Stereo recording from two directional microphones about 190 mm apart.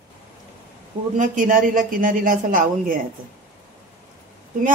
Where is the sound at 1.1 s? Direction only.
40° right (ahead or behind).